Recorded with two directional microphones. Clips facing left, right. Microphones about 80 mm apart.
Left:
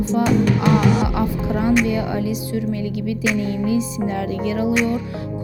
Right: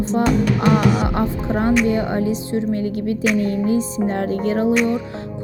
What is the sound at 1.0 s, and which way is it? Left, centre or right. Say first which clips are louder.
Speech: even; right.